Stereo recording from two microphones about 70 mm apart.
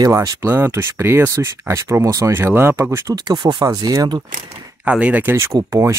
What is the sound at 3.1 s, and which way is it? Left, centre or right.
Speech, right.